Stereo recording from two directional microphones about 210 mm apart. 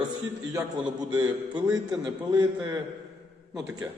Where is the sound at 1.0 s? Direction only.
20° right (ahead or behind).